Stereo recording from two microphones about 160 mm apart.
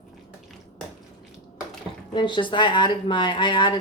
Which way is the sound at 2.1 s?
30° left (ahead or behind).